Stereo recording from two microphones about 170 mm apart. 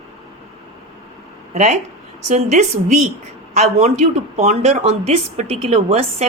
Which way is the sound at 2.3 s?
45° right (ahead or behind).